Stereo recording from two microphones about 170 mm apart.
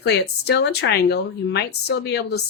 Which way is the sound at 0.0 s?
80° left.